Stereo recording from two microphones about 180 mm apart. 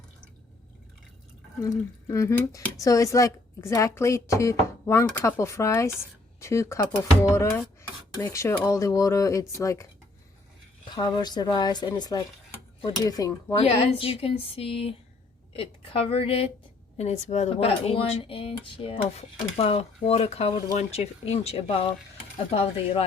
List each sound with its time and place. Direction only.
1.6 s speech: 15° left (ahead or behind)
10.8 s speech: 25° left (ahead or behind)
13.6 s speech: 35° left (ahead or behind)